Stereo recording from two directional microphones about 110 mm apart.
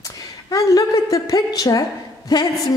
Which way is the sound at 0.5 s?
30° left (ahead or behind).